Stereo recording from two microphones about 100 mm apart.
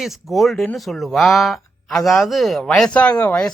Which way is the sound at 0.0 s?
Centre (ahead or behind).